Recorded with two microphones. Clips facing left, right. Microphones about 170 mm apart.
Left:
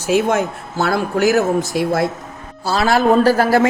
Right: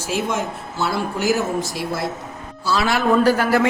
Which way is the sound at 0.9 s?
65° left (ahead or behind).